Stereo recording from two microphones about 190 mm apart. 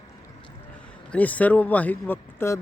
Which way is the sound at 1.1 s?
10° left (ahead or behind).